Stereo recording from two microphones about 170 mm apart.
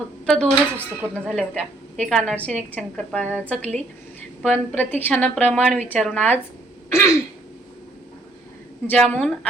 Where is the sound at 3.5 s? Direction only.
40° right (ahead or behind).